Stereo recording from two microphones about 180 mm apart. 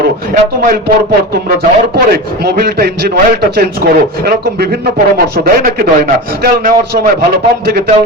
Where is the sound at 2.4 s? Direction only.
65° right (ahead or behind).